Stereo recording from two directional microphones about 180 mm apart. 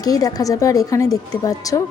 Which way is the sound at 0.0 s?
20° left (ahead or behind).